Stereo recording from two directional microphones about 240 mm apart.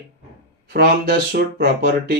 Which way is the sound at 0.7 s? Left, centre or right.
Right.